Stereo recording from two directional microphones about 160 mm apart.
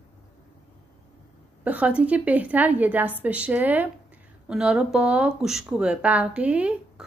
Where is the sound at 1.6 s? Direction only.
10° right (ahead or behind).